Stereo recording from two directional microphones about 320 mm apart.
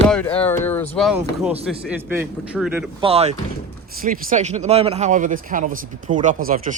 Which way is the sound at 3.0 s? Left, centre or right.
Centre.